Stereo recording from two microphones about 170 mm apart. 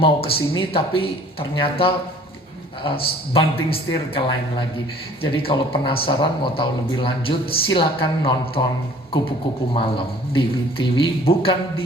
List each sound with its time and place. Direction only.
0.0 s speech: 35° left (ahead or behind)
9.7 s speech: 30° left (ahead or behind)